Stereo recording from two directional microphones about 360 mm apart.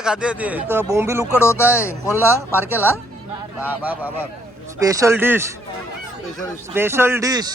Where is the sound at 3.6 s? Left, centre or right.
Centre.